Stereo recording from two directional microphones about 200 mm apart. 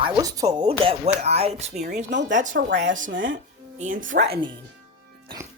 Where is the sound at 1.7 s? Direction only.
45° right (ahead or behind).